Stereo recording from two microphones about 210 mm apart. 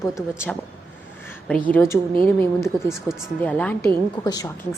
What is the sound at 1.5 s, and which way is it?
Speech, 5° left (ahead or behind).